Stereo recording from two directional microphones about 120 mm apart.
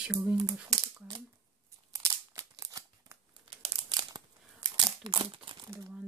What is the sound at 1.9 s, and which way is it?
Scissors, 25° right (ahead or behind).